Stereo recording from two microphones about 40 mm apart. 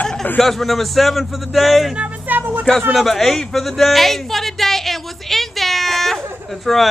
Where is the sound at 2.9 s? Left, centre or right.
Centre.